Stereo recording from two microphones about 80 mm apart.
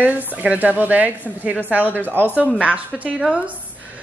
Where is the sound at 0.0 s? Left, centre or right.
Right.